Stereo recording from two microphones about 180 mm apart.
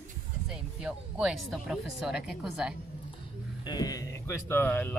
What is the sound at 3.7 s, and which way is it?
Speech, 20° left (ahead or behind).